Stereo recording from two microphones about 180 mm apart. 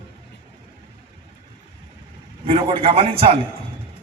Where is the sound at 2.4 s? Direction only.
30° right (ahead or behind).